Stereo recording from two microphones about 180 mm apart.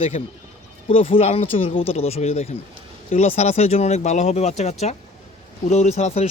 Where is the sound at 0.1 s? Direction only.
40° left (ahead or behind).